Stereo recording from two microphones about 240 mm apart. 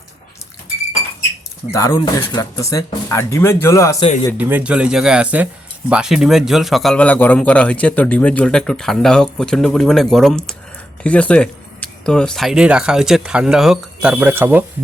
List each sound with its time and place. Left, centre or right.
1.7 s speech: centre
4.0 s speech: left
4.4 s a man's voice: centre